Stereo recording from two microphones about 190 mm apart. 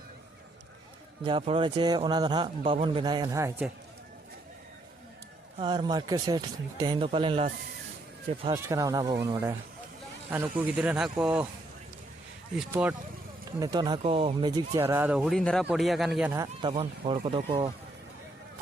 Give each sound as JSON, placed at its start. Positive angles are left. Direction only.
{"t": 1.2, "sound": "speech", "side_deg": -30}
{"t": 5.5, "sound": "speech", "side_deg": -25}
{"t": 8.5, "sound": "speech", "side_deg": -15}
{"t": 12.7, "sound": "speech", "side_deg": -10}
{"t": 13.6, "sound": "speech", "side_deg": -20}
{"t": 14.8, "sound": "speech", "side_deg": -10}
{"t": 16.6, "sound": "speech", "side_deg": -25}